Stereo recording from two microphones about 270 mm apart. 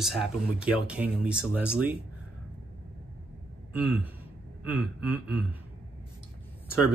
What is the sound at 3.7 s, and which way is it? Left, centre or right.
Speech, centre.